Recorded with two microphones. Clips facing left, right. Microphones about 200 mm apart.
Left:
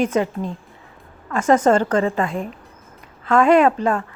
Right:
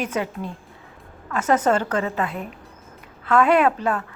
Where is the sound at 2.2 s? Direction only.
5° right (ahead or behind).